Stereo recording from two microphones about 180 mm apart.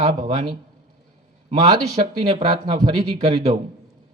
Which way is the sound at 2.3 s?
25° right (ahead or behind).